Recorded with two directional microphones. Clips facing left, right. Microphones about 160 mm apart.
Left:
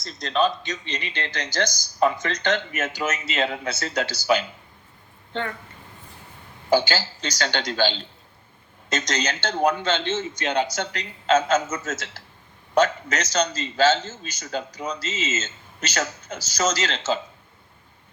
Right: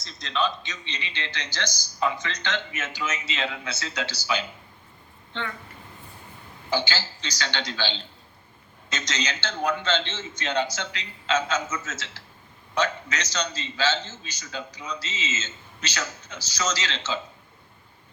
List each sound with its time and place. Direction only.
0.0 s a man's voice: 45° left (ahead or behind)
6.7 s a man's voice: 50° left (ahead or behind)